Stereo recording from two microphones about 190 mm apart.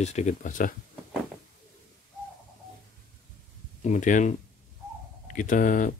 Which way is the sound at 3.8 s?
40° left (ahead or behind).